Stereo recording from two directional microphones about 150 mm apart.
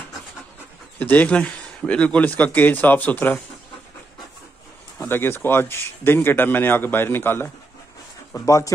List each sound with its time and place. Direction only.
0.9 s a man's voice: 10° left (ahead or behind)
5.0 s a man's voice: 15° left (ahead or behind)